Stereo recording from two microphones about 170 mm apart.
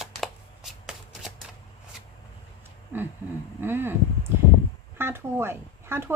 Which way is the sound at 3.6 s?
10° right (ahead or behind).